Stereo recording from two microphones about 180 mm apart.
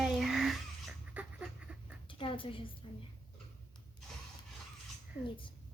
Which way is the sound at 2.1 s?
30° left (ahead or behind).